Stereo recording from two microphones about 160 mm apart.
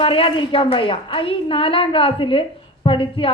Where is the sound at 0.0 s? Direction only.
35° left (ahead or behind).